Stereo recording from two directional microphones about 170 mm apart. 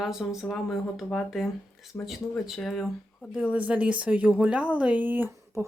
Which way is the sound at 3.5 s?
10° right (ahead or behind).